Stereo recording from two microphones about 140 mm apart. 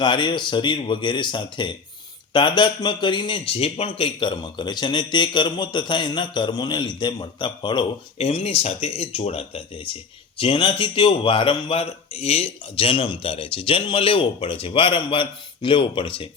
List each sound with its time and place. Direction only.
0.0 s a man's voice: 35° left (ahead or behind)
8.2 s a man's voice: 45° left (ahead or behind)